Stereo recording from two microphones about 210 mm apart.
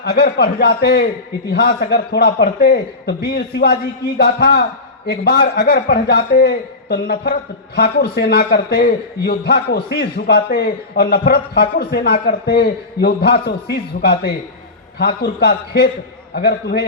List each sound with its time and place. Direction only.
0.0 s a man's voice: 50° left (ahead or behind)